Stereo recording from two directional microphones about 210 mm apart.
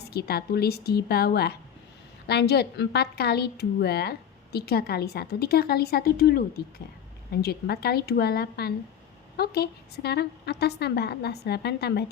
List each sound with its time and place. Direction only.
0.0 s a woman's voice: 50° left (ahead or behind)